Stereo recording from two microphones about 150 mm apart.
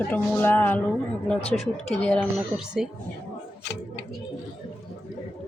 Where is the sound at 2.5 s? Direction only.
5° right (ahead or behind).